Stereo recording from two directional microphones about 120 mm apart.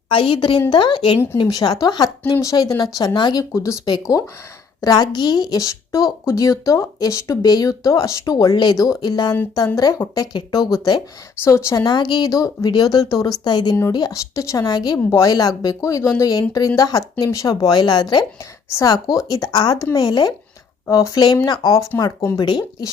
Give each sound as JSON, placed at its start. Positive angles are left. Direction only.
{"t": 0.1, "sound": "a woman's voice", "side_deg": 45}
{"t": 1.4, "sound": "a woman's voice", "side_deg": 35}
{"t": 11.4, "sound": "a woman's voice", "side_deg": 25}
{"t": 11.9, "sound": "a woman's voice", "side_deg": 40}
{"t": 14.9, "sound": "a woman's voice", "side_deg": 25}